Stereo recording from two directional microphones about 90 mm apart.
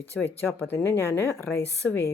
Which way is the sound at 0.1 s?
5° left (ahead or behind).